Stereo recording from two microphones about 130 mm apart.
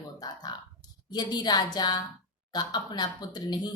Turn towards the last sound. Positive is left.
turn(degrees=35)  # may be behind; listen again after turning